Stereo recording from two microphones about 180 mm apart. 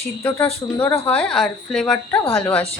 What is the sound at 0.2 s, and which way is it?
Speech, 15° left (ahead or behind).